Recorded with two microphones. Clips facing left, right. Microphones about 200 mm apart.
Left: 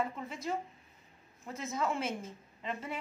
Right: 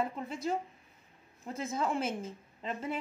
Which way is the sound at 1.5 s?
30° right (ahead or behind).